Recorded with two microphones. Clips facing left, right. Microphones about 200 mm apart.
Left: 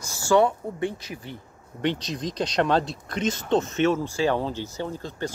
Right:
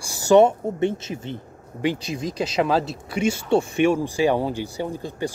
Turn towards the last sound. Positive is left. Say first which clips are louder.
# right 3 dB
turn(degrees=-10)  # may be behind; listen again after turning